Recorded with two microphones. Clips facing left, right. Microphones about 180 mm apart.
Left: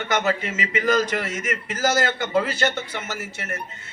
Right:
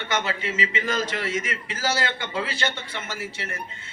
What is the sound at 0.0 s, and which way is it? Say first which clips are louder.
A man's voice: left 4 dB; 45° left (ahead or behind).